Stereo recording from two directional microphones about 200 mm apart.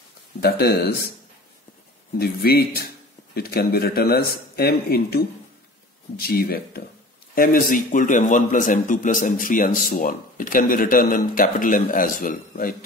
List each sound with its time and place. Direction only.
0.4 s a man's voice: 50° left (ahead or behind)
2.1 s a man's voice: 50° left (ahead or behind)